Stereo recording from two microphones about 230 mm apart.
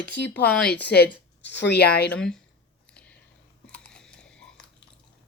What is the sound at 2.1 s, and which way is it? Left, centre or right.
Speech, centre.